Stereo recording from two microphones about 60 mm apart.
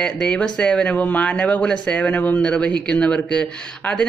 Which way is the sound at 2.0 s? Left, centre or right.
Left.